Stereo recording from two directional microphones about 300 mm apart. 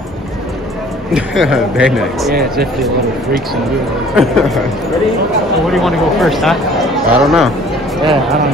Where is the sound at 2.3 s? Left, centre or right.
Right.